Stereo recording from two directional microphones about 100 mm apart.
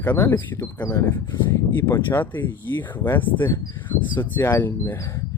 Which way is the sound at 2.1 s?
20° left (ahead or behind).